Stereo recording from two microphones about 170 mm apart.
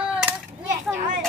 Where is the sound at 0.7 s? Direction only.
50° right (ahead or behind).